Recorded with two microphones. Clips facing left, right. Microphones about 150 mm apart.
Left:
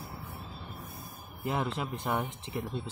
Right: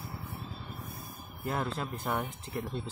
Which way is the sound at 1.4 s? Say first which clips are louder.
Left 1 dB; 15° left (ahead or behind).